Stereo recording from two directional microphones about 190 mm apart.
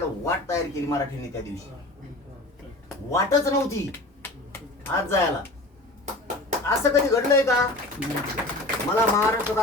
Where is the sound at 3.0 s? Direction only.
15° left (ahead or behind).